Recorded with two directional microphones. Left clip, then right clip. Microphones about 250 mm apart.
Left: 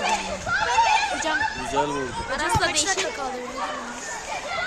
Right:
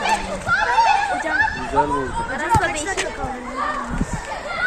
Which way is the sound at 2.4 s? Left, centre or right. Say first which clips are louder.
Right 3 dB; left.